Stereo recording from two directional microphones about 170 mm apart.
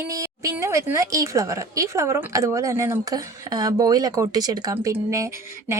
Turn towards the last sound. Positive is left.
turn(degrees=-15)  # may be behind; listen again after turning